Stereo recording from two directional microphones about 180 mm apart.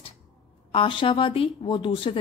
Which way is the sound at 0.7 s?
30° left (ahead or behind).